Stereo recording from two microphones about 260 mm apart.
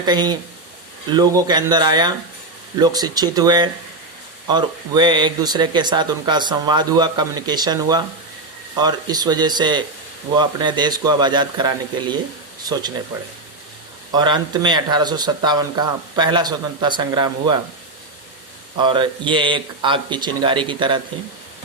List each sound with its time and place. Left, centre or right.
0.0 s speech: centre
14.1 s speech: centre
18.8 s speech: centre